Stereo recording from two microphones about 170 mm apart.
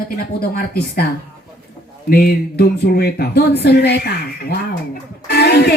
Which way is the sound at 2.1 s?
65° left (ahead or behind).